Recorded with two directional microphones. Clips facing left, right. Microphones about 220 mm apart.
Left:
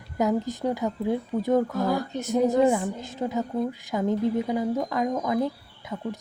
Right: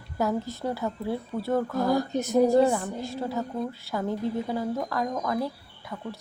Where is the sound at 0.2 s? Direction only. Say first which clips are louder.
Left 3 dB; 20° left (ahead or behind).